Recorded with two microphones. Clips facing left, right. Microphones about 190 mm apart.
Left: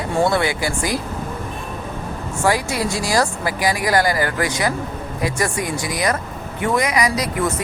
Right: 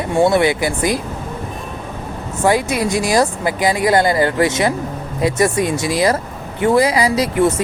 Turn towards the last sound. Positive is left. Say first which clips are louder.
# right 5 dB
turn(degrees=-25)  # may be behind; listen again after turning